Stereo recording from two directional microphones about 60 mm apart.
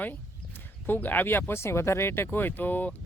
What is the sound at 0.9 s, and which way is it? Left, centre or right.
Speech, left.